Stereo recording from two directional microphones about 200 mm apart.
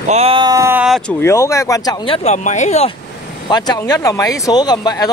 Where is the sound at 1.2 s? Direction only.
15° left (ahead or behind); by 2.9 s 35° left (ahead or behind).